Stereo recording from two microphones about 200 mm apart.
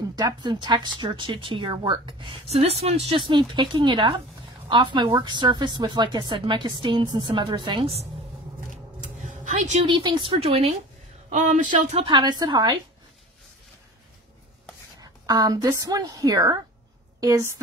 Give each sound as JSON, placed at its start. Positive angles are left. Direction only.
{"t": 0.1, "sound": "a woman's voice", "side_deg": -20}
{"t": 11.7, "sound": "speech", "side_deg": -25}
{"t": 15.0, "sound": "a woman's voice", "side_deg": -20}